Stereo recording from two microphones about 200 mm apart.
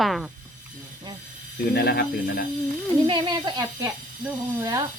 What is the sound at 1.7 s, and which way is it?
Speech, 50° left (ahead or behind).